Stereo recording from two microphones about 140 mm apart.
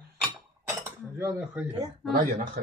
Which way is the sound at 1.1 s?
20° right (ahead or behind).